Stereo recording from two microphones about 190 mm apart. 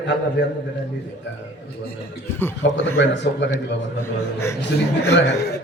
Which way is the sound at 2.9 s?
65° left (ahead or behind).